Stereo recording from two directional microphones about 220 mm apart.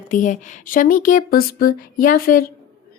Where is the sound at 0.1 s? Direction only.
35° left (ahead or behind).